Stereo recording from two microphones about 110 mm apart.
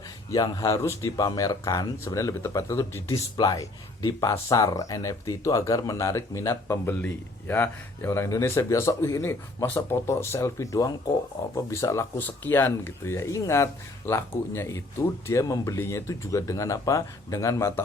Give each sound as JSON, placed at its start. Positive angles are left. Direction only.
{"t": 0.3, "sound": "speech", "side_deg": 40}
{"t": 1.1, "sound": "speech", "side_deg": 35}